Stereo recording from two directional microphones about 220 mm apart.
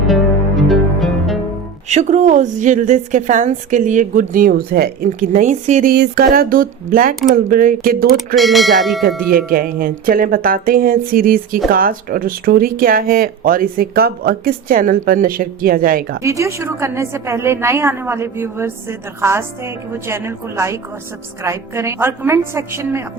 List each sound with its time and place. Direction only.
0.1 s music: centre (ahead or behind)
1.9 s speech: 30° right (ahead or behind)
8.4 s speech: centre (ahead or behind)
9.5 s speech: 40° right (ahead or behind)
16.2 s a woman's voice: 15° right (ahead or behind)